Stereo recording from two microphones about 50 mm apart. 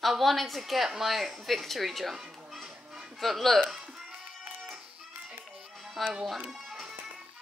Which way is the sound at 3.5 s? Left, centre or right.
Centre.